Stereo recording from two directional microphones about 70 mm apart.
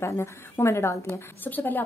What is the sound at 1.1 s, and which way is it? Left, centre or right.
Speech, left.